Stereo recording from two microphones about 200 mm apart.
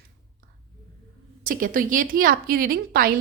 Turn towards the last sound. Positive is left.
turn(degrees=-45)  # may be behind; listen again after turning